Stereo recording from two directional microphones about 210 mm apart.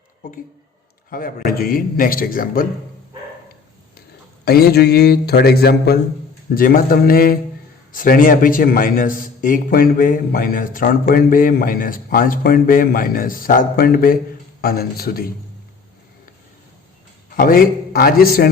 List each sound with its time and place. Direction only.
1.1 s a man's voice: 45° left (ahead or behind)
4.4 s a man's voice: 50° left (ahead or behind)
17.2 s a man's voice: 45° left (ahead or behind)